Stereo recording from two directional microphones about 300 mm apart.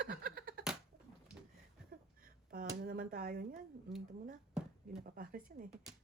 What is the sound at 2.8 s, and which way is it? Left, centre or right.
Speech, right.